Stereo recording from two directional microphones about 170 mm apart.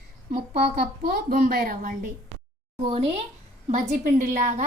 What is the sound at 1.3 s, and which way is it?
Speech, 55° right (ahead or behind).